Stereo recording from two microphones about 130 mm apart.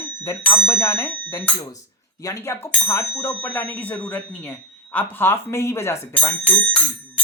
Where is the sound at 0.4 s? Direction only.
15° left (ahead or behind).